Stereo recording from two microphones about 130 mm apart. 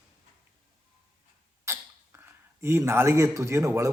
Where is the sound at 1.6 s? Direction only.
20° right (ahead or behind).